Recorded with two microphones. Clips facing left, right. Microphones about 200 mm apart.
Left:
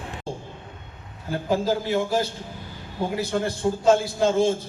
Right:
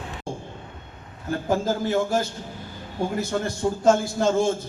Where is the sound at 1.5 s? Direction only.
50° right (ahead or behind).